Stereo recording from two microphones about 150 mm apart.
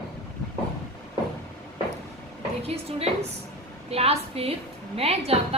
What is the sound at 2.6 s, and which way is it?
A woman's voice, 40° right (ahead or behind).